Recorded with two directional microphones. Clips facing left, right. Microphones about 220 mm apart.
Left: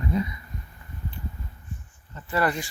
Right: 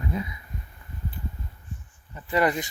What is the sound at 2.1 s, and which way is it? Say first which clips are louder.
Speech: right 2 dB; 15° right (ahead or behind).